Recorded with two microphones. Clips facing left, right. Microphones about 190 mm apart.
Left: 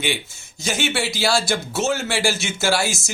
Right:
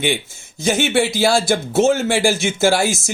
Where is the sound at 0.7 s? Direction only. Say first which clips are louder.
Right 7 dB; 55° right (ahead or behind).